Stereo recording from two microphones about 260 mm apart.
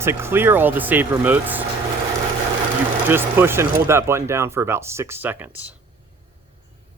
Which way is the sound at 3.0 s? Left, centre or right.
Centre.